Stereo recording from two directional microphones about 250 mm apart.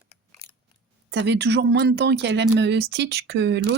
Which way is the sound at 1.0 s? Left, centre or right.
Right.